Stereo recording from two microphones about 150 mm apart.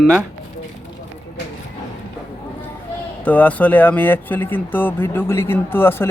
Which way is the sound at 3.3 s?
10° left (ahead or behind).